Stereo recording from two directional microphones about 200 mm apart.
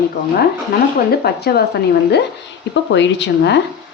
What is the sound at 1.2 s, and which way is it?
Speech, 50° left (ahead or behind).